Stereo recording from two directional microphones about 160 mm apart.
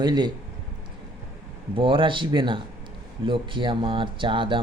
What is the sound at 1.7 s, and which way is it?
Speech, 30° right (ahead or behind).